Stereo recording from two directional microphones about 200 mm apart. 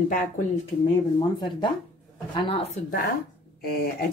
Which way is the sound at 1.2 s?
25° left (ahead or behind).